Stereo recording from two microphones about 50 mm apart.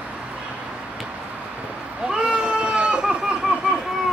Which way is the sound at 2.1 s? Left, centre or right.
Centre.